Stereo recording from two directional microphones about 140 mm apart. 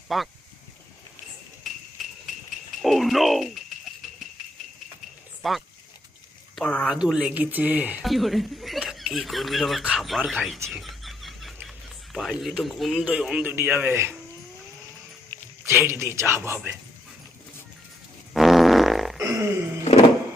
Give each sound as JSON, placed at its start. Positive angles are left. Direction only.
{"t": 0.1, "sound": "speech", "side_deg": 0}
{"t": 2.8, "sound": "speech", "side_deg": 0}
{"t": 5.4, "sound": "speech", "side_deg": 0}
{"t": 6.8, "sound": "speech", "side_deg": -5}
{"t": 8.0, "sound": "speech", "side_deg": 0}
{"t": 10.7, "sound": "a sound", "side_deg": 0}
{"t": 12.1, "sound": "speech", "side_deg": 0}
{"t": 15.6, "sound": "speech", "side_deg": -20}
{"t": 18.3, "sound": "fart", "side_deg": 0}
{"t": 19.2, "sound": "a sound", "side_deg": -20}